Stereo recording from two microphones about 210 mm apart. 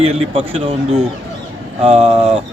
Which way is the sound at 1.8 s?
25° right (ahead or behind).